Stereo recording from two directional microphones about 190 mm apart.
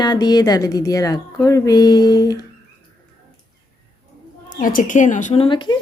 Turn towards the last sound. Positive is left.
turn(degrees=25)  # may be behind; listen again after turning